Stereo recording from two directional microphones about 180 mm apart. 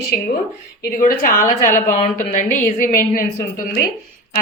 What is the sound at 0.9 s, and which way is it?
A woman's voice, 50° left (ahead or behind).